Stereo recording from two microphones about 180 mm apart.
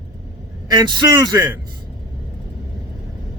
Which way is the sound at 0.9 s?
20° right (ahead or behind).